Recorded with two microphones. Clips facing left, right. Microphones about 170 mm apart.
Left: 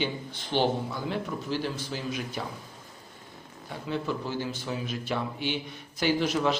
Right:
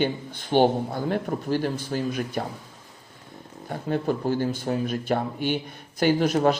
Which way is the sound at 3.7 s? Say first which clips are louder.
Right 6 dB; 50° right (ahead or behind).